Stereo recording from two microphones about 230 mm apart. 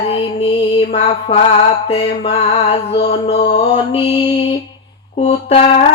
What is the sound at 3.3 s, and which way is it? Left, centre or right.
Music, left.